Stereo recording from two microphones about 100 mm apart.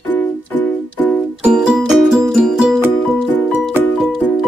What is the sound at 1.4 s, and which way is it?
Music, 10° right (ahead or behind).